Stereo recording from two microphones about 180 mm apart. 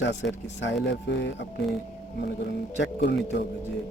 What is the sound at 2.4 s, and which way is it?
Speech, 75° left (ahead or behind).